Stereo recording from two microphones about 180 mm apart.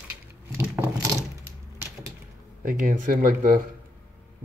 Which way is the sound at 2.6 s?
50° right (ahead or behind).